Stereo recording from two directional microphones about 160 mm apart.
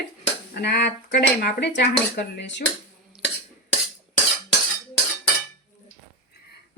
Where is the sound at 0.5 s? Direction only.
90° left.